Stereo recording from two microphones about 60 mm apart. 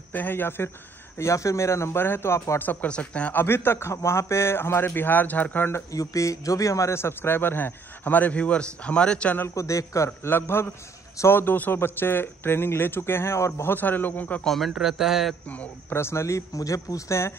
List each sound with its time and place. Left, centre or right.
0.1 s a man's voice: left
1.1 s speech: left
2.6 s a man's voice: left
2.9 s speech: centre
3.3 s a man's voice: left
5.9 s a man's voice: left; by 9.3 s centre
9.6 s a man's voice: left
10.3 s a man's voice: left
13.6 s a man's voice: left
14.4 s speech: centre
14.7 s a man's voice: centre
15.4 s speech: left
15.9 s a man's voice: left